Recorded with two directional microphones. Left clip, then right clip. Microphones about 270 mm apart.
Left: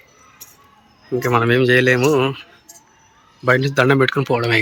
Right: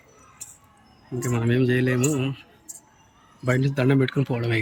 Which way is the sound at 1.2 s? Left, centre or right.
Centre.